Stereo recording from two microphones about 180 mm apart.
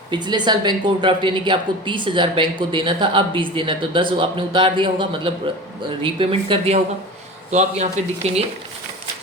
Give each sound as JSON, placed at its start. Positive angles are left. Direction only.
{"t": 0.1, "sound": "a woman's voice", "side_deg": -25}